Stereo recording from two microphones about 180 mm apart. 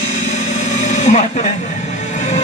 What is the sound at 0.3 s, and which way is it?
Music, 40° left (ahead or behind).